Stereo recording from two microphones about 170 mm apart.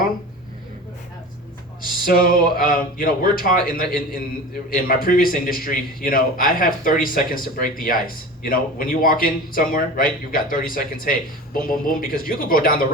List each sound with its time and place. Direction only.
1.8 s a man's voice: 60° left (ahead or behind)